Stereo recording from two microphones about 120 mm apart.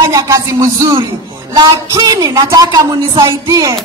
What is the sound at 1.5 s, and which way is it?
Music, 35° right (ahead or behind).